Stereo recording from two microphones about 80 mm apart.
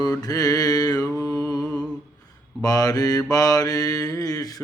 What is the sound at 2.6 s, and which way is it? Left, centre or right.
Mantra, left.